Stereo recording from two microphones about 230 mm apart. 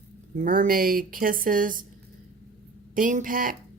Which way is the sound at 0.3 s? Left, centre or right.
Right.